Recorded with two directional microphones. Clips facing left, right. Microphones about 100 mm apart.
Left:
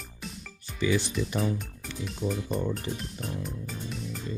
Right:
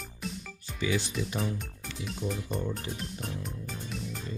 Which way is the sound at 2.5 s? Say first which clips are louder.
Left 3 dB; centre (ahead or behind).